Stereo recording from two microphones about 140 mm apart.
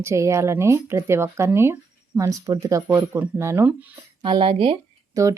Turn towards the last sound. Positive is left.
turn(degrees=-25)  # may be behind; listen again after turning